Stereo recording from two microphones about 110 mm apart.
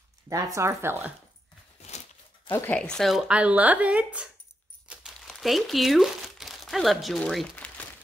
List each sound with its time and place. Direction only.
0.3 s speech: 30° right (ahead or behind)
1.8 s a sound: 90° left
2.5 s speech: 15° left (ahead or behind)
3.0 s speech: centre (ahead or behind)
5.2 s speech: centre (ahead or behind)
7.5 s crumpling: 15° left (ahead or behind)